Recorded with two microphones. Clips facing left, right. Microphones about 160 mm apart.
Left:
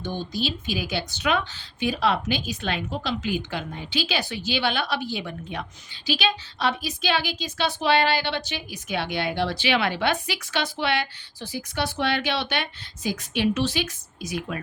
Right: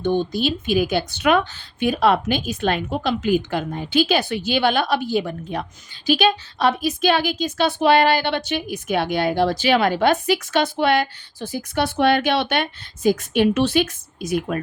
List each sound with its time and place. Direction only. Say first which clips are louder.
0.0 s speech: right 8 dB; 55° right (ahead or behind)